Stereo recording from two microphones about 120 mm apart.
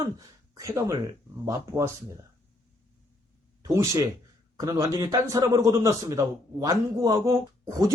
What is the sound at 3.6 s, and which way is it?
A man's voice, 25° right (ahead or behind).